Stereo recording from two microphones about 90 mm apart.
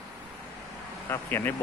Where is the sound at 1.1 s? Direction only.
25° left (ahead or behind).